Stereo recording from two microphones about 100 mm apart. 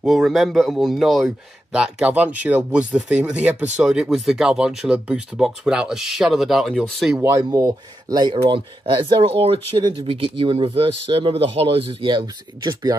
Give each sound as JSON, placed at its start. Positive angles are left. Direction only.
{"t": 0.0, "sound": "speech", "side_deg": 0}
{"t": 1.7, "sound": "speech", "side_deg": -10}
{"t": 7.2, "sound": "speech", "side_deg": -30}
{"t": 7.6, "sound": "speech", "side_deg": -45}
{"t": 8.5, "sound": "speech", "side_deg": -55}
{"t": 11.9, "sound": "speech", "side_deg": -55}